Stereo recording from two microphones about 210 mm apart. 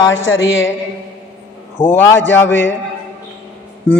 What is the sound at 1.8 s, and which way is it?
Speech, 10° left (ahead or behind).